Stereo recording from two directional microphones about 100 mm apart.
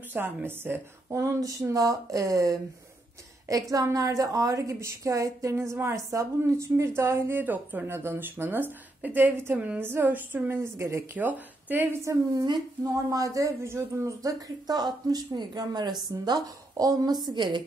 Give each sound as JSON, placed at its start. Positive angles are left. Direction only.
{"t": 0.1, "sound": "speech", "side_deg": -20}
{"t": 3.7, "sound": "speech", "side_deg": -35}
{"t": 11.1, "sound": "speech", "side_deg": -15}
{"t": 12.0, "sound": "a woman's voice", "side_deg": -35}